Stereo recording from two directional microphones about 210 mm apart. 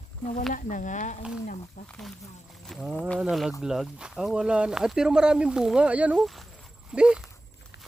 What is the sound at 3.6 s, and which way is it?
Speech, centre (ahead or behind).